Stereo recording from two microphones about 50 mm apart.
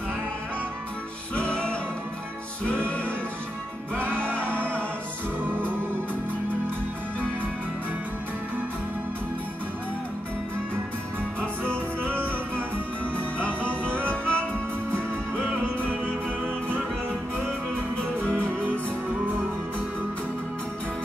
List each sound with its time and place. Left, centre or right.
1.3 s music: left
4.1 s music: left
4.4 s music: right
11.6 s music: right
13.1 s music: left
15.3 s music: right